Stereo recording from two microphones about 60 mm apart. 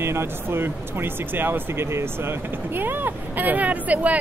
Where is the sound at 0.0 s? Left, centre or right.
Right.